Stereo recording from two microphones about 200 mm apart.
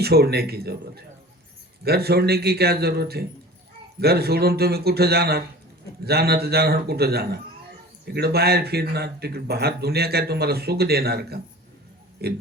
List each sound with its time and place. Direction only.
0.0 s speech: 50° right (ahead or behind)